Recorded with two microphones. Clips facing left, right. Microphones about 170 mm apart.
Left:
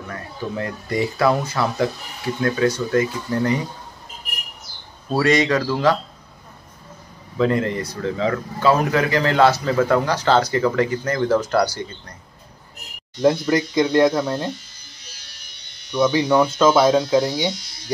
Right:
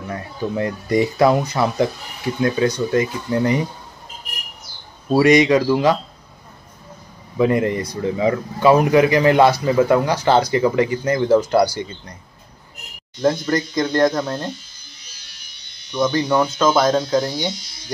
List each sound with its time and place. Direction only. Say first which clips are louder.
0.1 s speech: right 4 dB; 20° right (ahead or behind)
5.1 s speech: right 5 dB; 15° right (ahead or behind)
7.3 s speech: right 2 dB; 15° right (ahead or behind)
13.2 s speech: left 1 dB; 5° left (ahead or behind)
15.9 s speech: left 1 dB; 5° left (ahead or behind)
16.3 s speech: left 1 dB; 5° right (ahead or behind)
16.6 s speech: left 2 dB; 5° left (ahead or behind)